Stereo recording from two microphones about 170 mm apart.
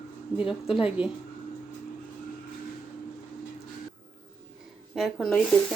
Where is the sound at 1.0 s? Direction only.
30° left (ahead or behind).